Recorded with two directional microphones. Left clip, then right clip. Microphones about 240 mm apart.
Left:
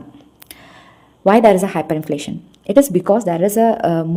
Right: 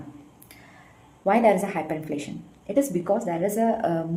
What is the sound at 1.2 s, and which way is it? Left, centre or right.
A woman's voice, left.